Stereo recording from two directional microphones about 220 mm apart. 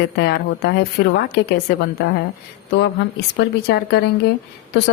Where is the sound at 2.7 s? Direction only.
50° left (ahead or behind).